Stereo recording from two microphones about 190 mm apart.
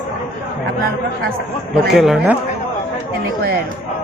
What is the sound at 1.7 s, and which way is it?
Speech, centre (ahead or behind).